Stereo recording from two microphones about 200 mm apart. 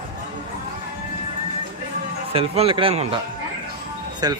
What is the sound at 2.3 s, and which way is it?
Speech, 30° right (ahead or behind).